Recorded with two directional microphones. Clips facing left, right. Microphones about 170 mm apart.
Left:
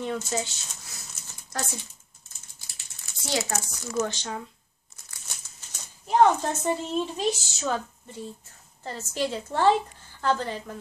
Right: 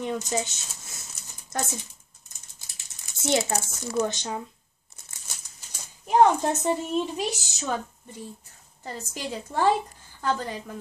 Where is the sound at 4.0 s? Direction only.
20° right (ahead or behind).